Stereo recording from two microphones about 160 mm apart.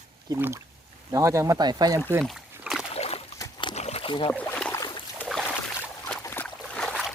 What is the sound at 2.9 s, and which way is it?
Splash, 40° left (ahead or behind).